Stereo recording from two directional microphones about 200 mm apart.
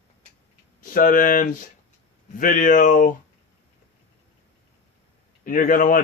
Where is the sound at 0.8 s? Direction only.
40° left (ahead or behind).